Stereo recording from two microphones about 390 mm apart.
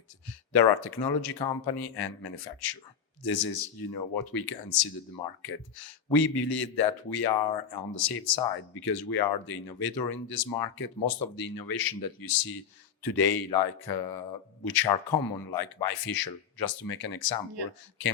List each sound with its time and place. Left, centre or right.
0.5 s speech: left